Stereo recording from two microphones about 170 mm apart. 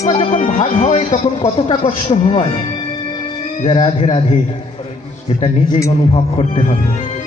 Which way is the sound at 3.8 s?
35° left (ahead or behind).